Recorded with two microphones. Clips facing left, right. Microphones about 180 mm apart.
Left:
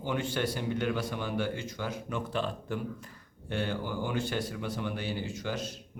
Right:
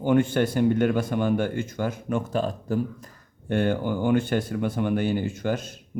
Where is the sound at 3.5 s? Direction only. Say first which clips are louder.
Right 9 dB; 55° right (ahead or behind).